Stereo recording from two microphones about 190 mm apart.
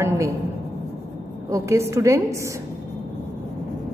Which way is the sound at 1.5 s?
15° right (ahead or behind).